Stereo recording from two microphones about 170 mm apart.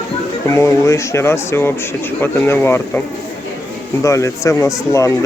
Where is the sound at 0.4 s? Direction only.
15° left (ahead or behind).